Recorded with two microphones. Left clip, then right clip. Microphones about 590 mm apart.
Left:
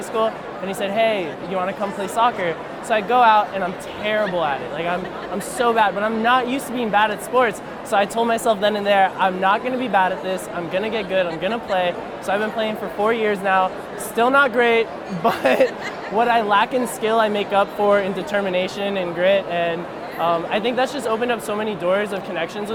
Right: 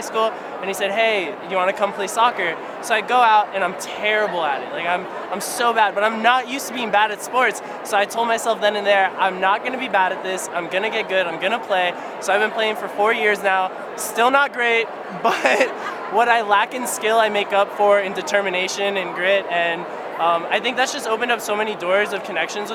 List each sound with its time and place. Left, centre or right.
0.2 s speech: left